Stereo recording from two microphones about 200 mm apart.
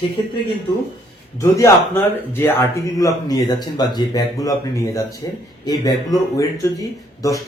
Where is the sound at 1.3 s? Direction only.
15° left (ahead or behind).